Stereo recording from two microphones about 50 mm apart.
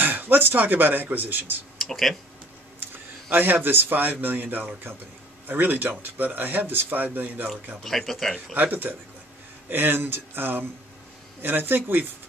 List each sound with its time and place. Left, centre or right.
0.0 s a man's voice: right
1.8 s speech: centre
3.3 s a man's voice: right
7.8 s speech: centre
8.5 s a man's voice: right